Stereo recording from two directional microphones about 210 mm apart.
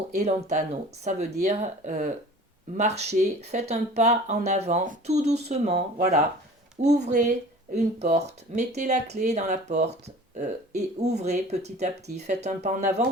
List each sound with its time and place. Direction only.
0.1 s speech: 30° right (ahead or behind)